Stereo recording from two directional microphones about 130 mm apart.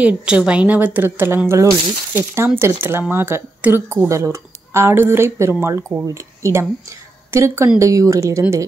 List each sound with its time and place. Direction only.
0.0 s a woman's voice: 5° right (ahead or behind); by 8.6 s 20° right (ahead or behind)